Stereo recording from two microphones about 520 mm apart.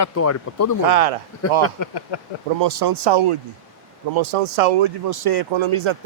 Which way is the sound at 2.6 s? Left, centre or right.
Right.